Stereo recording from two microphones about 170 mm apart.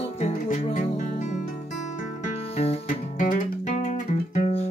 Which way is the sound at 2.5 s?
35° left (ahead or behind).